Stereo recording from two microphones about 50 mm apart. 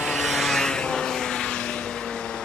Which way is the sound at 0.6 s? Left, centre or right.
Centre.